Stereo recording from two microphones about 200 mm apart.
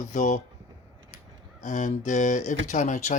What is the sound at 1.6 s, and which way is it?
Speech, 40° left (ahead or behind).